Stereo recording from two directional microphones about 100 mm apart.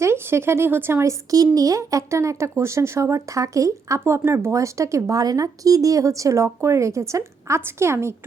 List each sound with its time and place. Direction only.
0.0 s speech: 25° right (ahead or behind)
1.5 s speech: 35° right (ahead or behind)